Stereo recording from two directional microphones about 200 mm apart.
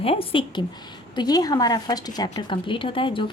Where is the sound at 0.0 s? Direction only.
30° left (ahead or behind).